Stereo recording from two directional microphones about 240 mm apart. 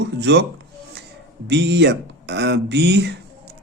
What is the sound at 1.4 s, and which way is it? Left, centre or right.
A man's voice, right.